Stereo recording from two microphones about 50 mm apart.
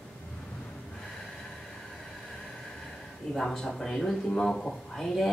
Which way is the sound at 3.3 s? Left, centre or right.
Centre.